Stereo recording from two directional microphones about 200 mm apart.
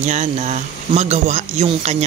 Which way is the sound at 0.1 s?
35° right (ahead or behind).